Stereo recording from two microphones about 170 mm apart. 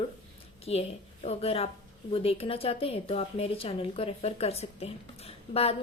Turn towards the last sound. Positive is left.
turn(degrees=35)  # may be behind; listen again after turning